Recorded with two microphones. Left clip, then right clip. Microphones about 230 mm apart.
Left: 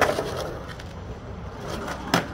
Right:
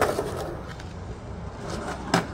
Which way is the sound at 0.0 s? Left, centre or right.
Left.